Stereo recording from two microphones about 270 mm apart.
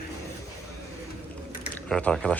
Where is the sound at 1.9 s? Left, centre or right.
Centre.